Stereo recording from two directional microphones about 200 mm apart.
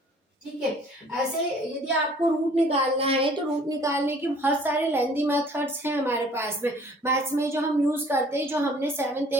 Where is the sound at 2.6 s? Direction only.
30° right (ahead or behind).